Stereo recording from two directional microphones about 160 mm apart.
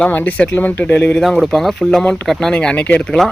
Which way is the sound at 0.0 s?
10° left (ahead or behind).